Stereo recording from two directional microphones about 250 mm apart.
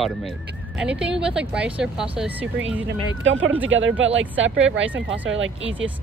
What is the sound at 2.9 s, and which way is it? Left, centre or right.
Speech, right.